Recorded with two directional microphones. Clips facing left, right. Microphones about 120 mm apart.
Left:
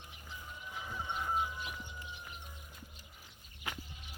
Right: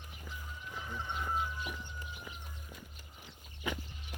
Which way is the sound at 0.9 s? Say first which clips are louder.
Left 1 dB; 10° left (ahead or behind).